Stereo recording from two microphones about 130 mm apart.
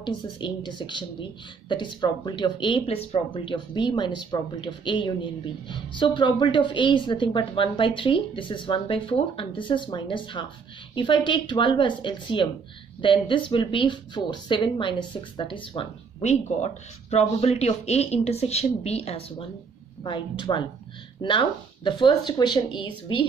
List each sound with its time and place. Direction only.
0.0 s a woman's voice: 35° left (ahead or behind)
16.2 s speech: 60° left (ahead or behind)
20.0 s a woman's voice: 35° left (ahead or behind)